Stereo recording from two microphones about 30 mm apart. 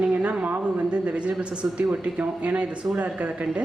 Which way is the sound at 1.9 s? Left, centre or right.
Right.